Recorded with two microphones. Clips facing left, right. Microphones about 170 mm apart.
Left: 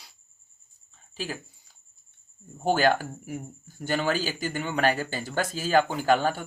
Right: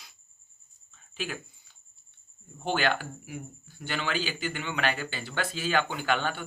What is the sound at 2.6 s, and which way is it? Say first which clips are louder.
Speech: left 5 dB; 40° left (ahead or behind).